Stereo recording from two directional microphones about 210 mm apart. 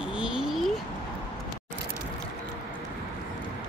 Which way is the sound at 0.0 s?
5° right (ahead or behind).